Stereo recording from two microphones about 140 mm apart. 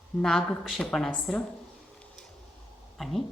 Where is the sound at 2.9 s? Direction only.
Centre (ahead or behind).